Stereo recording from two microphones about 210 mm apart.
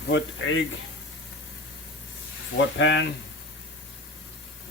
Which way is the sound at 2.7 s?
60° left (ahead or behind).